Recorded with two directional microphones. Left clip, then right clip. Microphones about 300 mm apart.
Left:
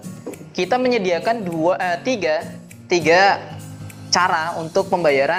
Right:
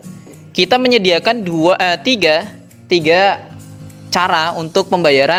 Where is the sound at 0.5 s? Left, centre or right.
Right.